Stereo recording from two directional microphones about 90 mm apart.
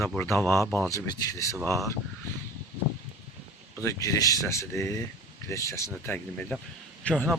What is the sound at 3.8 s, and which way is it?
Speech, 35° left (ahead or behind).